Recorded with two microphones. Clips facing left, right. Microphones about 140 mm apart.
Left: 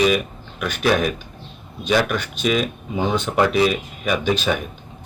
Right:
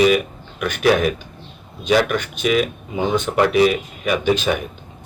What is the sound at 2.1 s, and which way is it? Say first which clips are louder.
Speech: right 2 dB; 15° right (ahead or behind).